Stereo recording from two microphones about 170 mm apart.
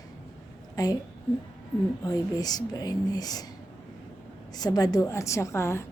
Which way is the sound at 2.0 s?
20° left (ahead or behind).